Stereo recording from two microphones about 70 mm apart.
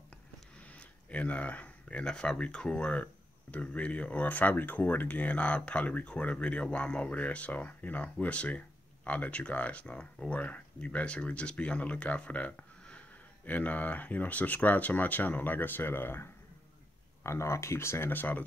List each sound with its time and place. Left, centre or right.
0.7 s speech: centre